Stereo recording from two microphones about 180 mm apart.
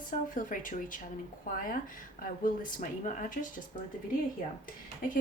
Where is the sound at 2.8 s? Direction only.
45° left (ahead or behind).